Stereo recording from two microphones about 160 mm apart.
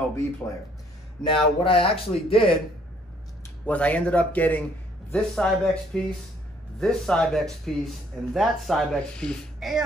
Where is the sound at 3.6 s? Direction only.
10° left (ahead or behind).